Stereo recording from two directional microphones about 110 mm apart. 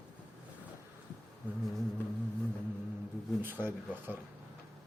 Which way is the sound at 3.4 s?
20° right (ahead or behind).